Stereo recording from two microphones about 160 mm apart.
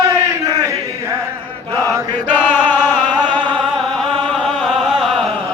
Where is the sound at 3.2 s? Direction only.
30° right (ahead or behind).